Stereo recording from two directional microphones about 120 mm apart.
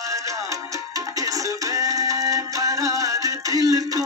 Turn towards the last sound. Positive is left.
turn(degrees=-30)  # may be behind; listen again after turning